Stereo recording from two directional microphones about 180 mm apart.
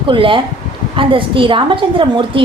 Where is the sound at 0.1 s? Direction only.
30° right (ahead or behind).